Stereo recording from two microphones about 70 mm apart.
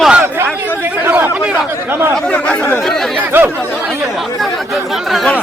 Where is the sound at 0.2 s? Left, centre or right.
Right.